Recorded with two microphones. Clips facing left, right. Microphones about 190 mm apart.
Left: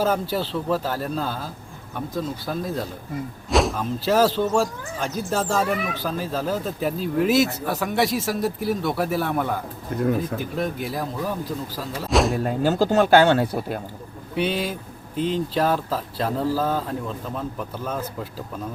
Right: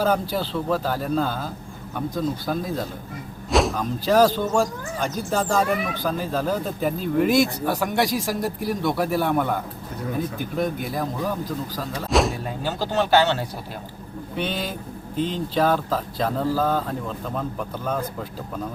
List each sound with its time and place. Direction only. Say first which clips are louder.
0.0 s speech: even; 5° left (ahead or behind)
10.0 s speech: left 5 dB; 50° left (ahead or behind)
10.6 s speech: right 3 dB; centre (ahead or behind)
12.0 s a sound: left 1 dB; centre (ahead or behind)
12.5 s speech: left 7 dB; 45° left (ahead or behind)
14.3 s speech: left 3 dB; 5° left (ahead or behind)